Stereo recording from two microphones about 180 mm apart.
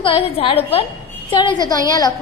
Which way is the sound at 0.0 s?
30° left (ahead or behind).